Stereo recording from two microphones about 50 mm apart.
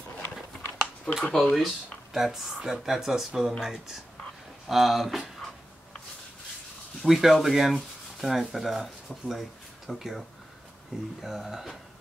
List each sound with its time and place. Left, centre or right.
0.7 s speech: centre
2.1 s speech: centre
7.0 s speech: centre
7.4 s sanding: centre
9.8 s speech: centre
10.9 s speech: centre